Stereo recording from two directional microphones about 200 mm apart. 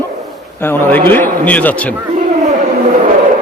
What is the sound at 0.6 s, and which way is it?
A man's voice, 10° left (ahead or behind).